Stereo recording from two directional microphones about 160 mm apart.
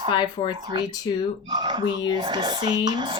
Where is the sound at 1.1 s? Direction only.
25° left (ahead or behind).